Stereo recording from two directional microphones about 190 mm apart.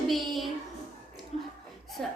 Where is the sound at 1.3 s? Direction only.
35° left (ahead or behind).